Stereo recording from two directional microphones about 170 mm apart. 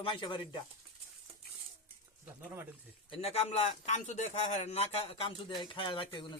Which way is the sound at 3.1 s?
35° left (ahead or behind).